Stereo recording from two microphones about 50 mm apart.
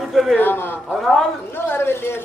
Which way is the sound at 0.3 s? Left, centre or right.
Left.